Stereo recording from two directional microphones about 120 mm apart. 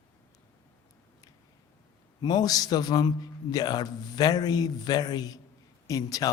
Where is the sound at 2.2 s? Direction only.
35° left (ahead or behind).